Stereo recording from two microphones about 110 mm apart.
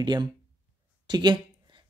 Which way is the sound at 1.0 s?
40° right (ahead or behind).